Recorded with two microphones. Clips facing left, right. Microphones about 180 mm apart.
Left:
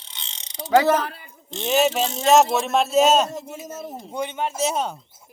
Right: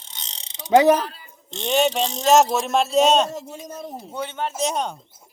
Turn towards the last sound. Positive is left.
turn(degrees=5)  # may be behind; listen again after turning